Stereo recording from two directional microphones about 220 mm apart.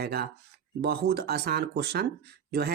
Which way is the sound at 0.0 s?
45° right (ahead or behind).